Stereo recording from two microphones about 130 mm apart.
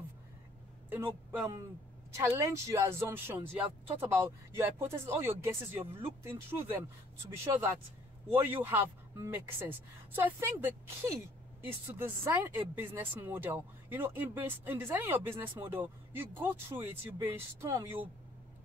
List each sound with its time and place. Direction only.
0.8 s speech: 15° right (ahead or behind)